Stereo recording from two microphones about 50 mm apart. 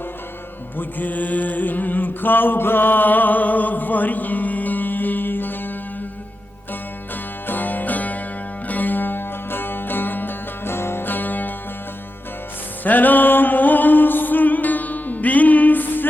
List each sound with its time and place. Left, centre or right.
0.8 s mantra: left
7.4 s music: left
12.8 s music: left